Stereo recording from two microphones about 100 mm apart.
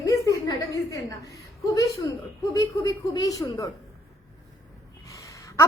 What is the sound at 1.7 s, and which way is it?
Speech, 35° left (ahead or behind).